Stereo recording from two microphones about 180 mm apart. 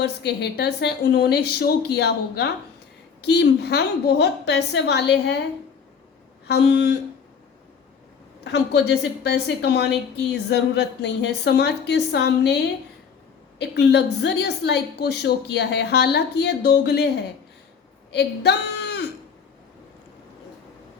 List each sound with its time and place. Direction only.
0.0 s a woman's voice: 65° left (ahead or behind)
6.5 s a woman's voice: 70° left (ahead or behind)
8.4 s a woman's voice: 70° left (ahead or behind)